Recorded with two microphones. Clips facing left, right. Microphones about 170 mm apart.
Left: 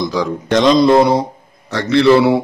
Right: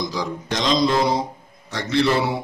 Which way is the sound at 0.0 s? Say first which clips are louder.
Left 8 dB; 65° left (ahead or behind).